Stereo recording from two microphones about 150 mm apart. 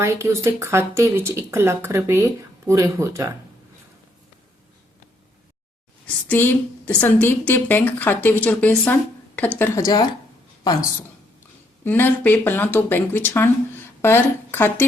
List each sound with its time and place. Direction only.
0.0 s speech: 20° right (ahead or behind)
6.2 s speech: 10° left (ahead or behind)
9.6 s a woman's voice: 20° left (ahead or behind)
11.9 s speech: 10° left (ahead or behind)